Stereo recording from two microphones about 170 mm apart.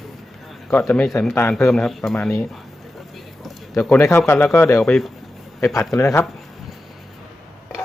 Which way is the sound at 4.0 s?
15° left (ahead or behind).